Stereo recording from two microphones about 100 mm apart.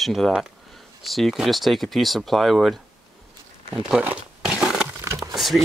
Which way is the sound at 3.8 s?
5° right (ahead or behind).